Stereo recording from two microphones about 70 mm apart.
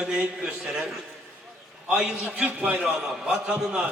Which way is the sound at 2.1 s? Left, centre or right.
Right.